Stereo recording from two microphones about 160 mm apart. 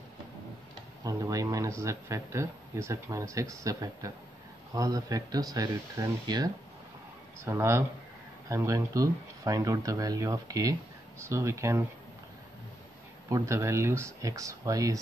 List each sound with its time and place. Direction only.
1.0 s speech: 20° right (ahead or behind)
13.3 s speech: 15° right (ahead or behind)